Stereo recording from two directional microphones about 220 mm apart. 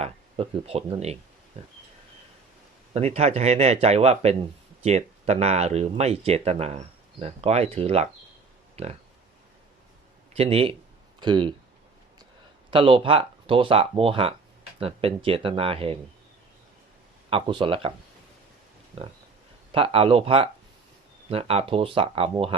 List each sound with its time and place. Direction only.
0.0 s speech: 25° right (ahead or behind)
2.9 s speech: 30° right (ahead or behind)
8.7 s a sound: 30° right (ahead or behind)
10.3 s speech: 25° right (ahead or behind)
12.7 s speech: 25° right (ahead or behind)
17.2 s speech: 25° right (ahead or behind)
19.7 s speech: 25° right (ahead or behind)